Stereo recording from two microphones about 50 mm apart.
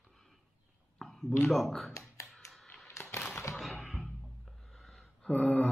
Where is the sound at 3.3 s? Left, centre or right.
Left.